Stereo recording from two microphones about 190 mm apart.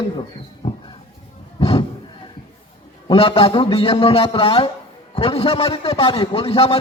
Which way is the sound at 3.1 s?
30° left (ahead or behind).